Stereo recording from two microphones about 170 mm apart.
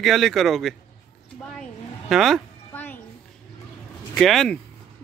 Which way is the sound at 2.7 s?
10° left (ahead or behind).